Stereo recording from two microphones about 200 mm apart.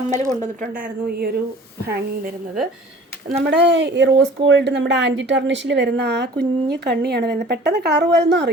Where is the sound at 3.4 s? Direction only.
60° right (ahead or behind).